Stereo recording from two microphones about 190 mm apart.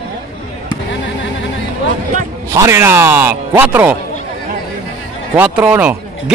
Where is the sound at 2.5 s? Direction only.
15° right (ahead or behind).